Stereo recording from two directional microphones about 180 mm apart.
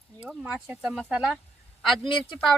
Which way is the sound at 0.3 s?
5° right (ahead or behind).